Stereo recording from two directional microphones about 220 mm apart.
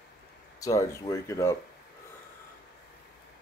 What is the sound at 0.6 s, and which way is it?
Speech, 15° left (ahead or behind).